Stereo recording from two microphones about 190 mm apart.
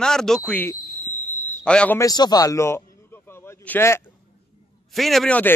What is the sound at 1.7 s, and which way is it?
A man's voice, 5° left (ahead or behind).